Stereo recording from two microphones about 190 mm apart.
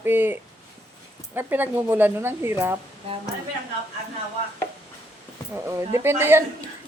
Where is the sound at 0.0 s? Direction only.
10° right (ahead or behind).